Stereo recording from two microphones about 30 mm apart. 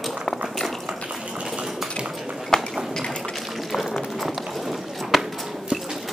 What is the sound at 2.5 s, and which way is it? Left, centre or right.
Run, centre.